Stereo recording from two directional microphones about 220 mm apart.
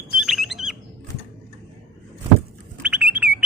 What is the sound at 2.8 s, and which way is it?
Bird, 5° right (ahead or behind).